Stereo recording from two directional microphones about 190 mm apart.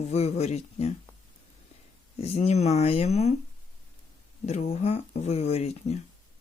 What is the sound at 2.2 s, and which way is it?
Speech, 35° left (ahead or behind).